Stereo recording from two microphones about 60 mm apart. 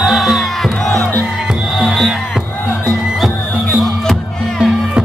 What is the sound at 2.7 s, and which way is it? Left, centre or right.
Music, left.